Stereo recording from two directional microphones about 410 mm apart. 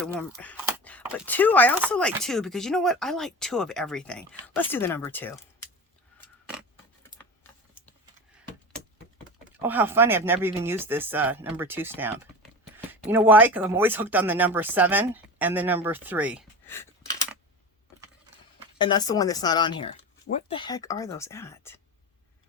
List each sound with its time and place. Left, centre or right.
0.0 s speech: centre
6.1 s a sound: centre
8.7 s speech: centre
18.8 s speech: centre